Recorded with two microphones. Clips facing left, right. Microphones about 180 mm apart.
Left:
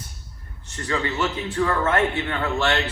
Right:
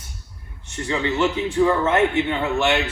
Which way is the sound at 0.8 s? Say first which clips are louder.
Right 4 dB; 15° right (ahead or behind).